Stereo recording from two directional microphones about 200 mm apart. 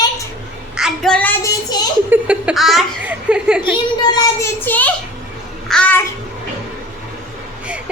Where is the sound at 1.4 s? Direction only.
20° left (ahead or behind).